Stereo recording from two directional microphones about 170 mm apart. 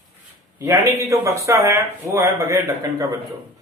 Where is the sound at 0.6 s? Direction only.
20° right (ahead or behind).